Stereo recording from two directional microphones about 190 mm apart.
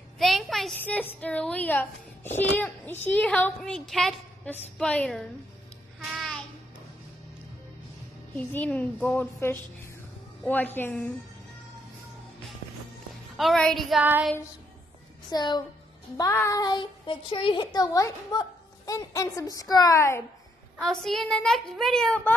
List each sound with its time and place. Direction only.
0.2 s a child's voice: centre (ahead or behind)
6.1 s child singing: centre (ahead or behind)
8.4 s a child's voice: 10° left (ahead or behind)
13.4 s a woman's voice: centre (ahead or behind)
15.2 s a woman's voice: 20° left (ahead or behind)
20.8 s a woman's voice: centre (ahead or behind)